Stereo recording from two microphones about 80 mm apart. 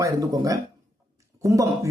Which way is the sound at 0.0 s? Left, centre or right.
Right.